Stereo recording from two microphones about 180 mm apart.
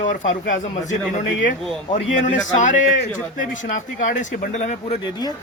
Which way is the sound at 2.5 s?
45° left (ahead or behind).